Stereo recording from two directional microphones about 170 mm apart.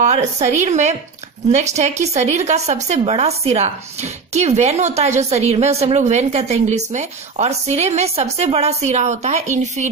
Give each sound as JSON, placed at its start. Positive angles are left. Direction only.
{"t": 0.0, "sound": "a woman's voice", "side_deg": -40}